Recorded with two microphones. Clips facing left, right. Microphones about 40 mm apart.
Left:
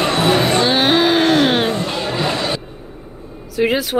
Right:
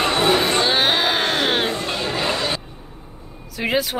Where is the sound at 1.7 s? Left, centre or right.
Left.